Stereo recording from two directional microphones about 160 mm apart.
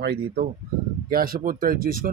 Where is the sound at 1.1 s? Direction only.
65° right (ahead or behind).